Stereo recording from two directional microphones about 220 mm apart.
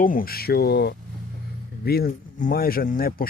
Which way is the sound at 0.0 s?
40° left (ahead or behind).